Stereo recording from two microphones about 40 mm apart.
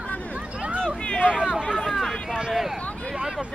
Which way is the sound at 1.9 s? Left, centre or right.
Centre.